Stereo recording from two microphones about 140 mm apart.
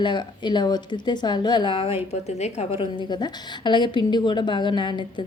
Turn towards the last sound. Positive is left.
turn(degrees=35)  # may be behind; listen again after turning